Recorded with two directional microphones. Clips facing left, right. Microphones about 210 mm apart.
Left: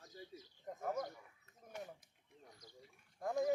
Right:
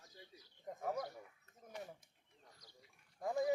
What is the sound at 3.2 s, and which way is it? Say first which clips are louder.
Speech: even; centre (ahead or behind).